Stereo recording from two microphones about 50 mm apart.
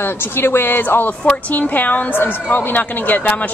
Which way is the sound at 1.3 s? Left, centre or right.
Left.